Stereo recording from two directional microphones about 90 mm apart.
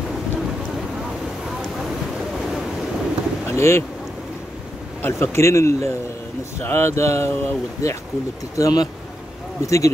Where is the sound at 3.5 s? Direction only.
30° left (ahead or behind).